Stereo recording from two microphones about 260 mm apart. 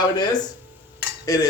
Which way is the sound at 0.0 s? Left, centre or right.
Centre.